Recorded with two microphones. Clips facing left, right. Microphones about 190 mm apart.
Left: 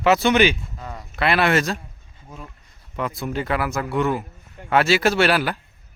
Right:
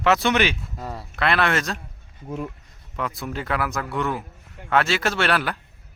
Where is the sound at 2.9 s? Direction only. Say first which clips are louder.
Left 3 dB; centre (ahead or behind).